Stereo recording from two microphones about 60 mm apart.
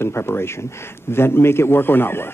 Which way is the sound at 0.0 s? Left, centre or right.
Left.